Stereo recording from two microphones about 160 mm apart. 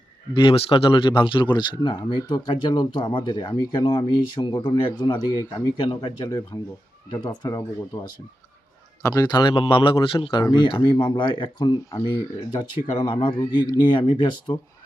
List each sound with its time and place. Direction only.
0.3 s speech: 30° left (ahead or behind)
9.0 s speech: 20° left (ahead or behind)
12.5 s speech: 30° left (ahead or behind)